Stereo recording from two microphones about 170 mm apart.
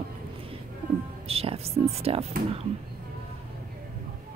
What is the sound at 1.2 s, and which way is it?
Speech, 35° right (ahead or behind).